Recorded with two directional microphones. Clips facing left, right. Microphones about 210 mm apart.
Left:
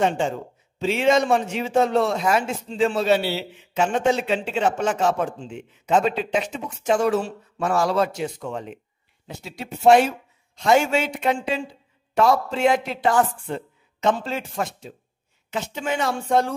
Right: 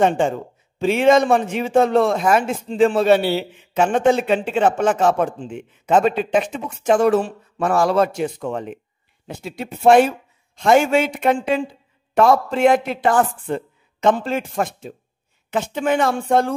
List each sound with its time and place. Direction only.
0.0 s a man's voice: 55° right (ahead or behind)